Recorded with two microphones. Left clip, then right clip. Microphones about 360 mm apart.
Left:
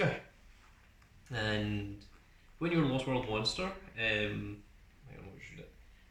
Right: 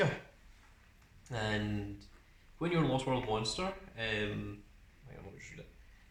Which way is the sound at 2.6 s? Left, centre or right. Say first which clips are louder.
Even; centre.